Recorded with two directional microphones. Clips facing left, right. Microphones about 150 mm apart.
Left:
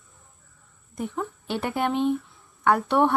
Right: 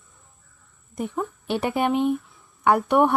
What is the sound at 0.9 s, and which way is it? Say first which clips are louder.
Speech: right 2 dB; 20° right (ahead or behind).